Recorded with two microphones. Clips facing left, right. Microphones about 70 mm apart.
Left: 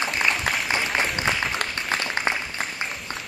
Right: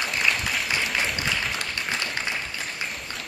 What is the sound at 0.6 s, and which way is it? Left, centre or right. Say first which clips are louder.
Applause: left 2 dB; left.